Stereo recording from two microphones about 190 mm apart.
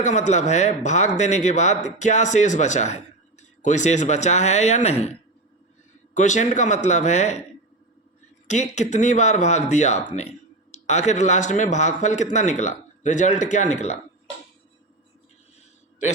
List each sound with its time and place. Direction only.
0.0 s a man's voice: 40° left (ahead or behind)
6.1 s a man's voice: 40° left (ahead or behind)
8.4 s a man's voice: 40° left (ahead or behind)